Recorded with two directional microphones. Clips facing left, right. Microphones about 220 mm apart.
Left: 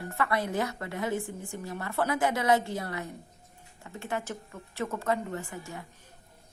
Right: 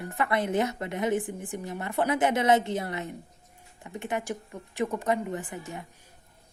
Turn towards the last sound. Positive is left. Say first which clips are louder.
# right 2 dB
turn(degrees=-20)  # may be behind; listen again after turning